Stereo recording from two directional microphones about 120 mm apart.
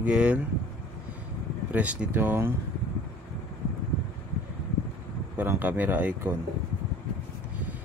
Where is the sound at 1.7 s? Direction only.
10° right (ahead or behind).